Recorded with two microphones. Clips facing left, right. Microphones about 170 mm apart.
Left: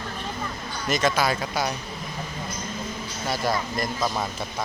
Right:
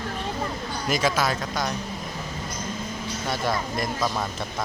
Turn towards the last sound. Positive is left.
turn(degrees=0)  # may be behind; listen again after turning